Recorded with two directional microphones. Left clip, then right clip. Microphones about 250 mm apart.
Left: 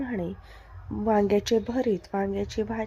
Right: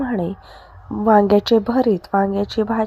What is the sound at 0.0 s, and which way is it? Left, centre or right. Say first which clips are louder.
A woman's voice: right 9 dB; centre.